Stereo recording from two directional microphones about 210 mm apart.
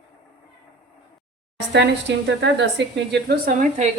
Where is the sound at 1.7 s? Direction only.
55° right (ahead or behind).